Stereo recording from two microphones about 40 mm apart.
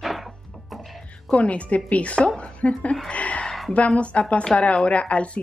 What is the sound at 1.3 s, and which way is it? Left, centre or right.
A woman's voice, left.